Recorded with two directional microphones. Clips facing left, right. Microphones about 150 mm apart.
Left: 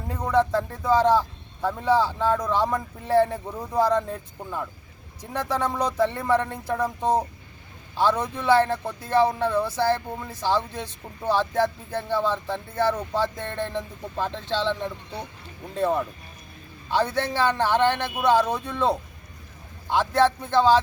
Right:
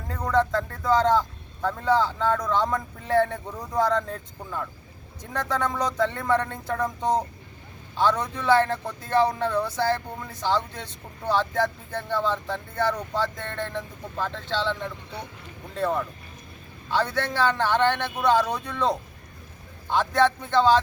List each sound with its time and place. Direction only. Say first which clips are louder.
0.1 s speech: left 1 dB; 10° left (ahead or behind)